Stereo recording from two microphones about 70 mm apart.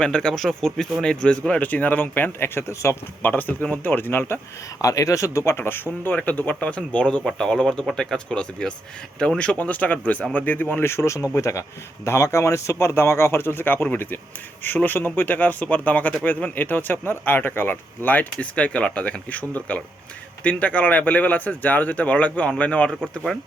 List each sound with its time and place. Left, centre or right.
0.0 s speech: centre
1.5 s speech: left
3.2 s speech: left
4.8 s speech: left
5.5 s speech: left
10.8 s speech: left; by 22.9 s centre
23.3 s speech: centre